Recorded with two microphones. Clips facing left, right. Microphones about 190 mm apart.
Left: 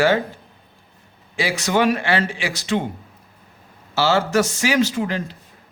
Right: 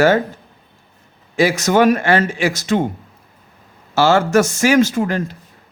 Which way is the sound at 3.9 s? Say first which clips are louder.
Right 5 dB; 50° right (ahead or behind).